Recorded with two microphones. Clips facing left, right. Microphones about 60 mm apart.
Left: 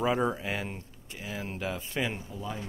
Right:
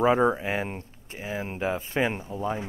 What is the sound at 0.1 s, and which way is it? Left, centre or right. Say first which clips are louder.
Speech: right 6 dB; right.